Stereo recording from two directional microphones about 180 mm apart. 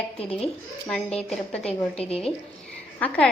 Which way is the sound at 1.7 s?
35° left (ahead or behind).